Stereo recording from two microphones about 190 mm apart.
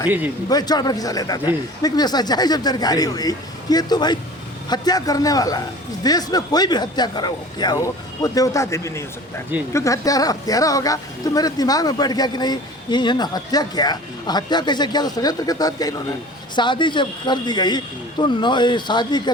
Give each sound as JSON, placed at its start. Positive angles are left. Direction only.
{"t": 0.4, "sound": "speech", "side_deg": 20}